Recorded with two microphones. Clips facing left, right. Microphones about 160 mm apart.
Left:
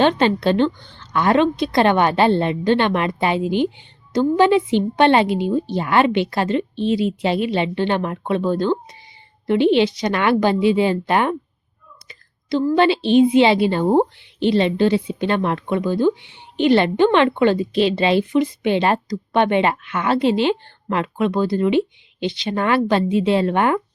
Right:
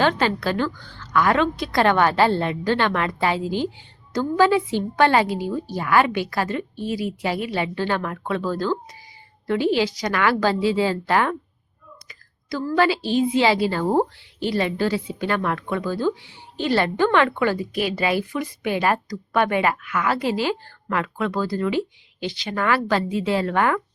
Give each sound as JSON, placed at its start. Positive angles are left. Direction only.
{"t": 0.0, "sound": "a woman's voice", "side_deg": 20}